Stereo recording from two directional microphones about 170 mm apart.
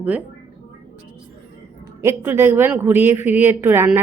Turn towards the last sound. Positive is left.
turn(degrees=-10)  # may be behind; listen again after turning